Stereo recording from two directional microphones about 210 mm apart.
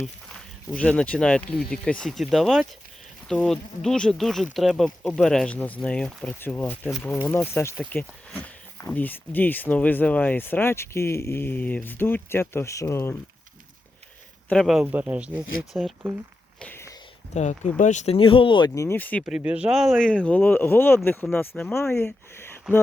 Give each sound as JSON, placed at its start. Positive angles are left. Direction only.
{"t": 0.7, "sound": "speech", "side_deg": 5}
{"t": 14.5, "sound": "speech", "side_deg": 0}
{"t": 16.6, "sound": "a sound", "side_deg": 10}
{"t": 17.3, "sound": "speech", "side_deg": 35}
{"t": 19.2, "sound": "speech", "side_deg": -5}